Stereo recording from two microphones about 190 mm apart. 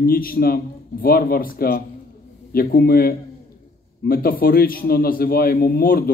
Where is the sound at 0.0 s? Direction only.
50° left (ahead or behind).